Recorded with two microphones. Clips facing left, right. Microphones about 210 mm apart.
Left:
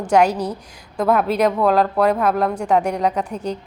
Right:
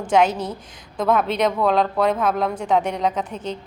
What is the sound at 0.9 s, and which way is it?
Speech, centre (ahead or behind).